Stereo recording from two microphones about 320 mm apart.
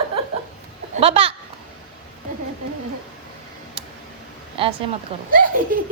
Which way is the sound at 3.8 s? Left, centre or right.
Centre.